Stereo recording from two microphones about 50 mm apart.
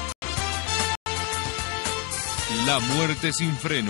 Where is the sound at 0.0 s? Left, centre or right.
Left.